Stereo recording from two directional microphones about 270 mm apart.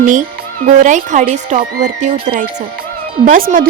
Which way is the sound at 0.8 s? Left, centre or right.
Right.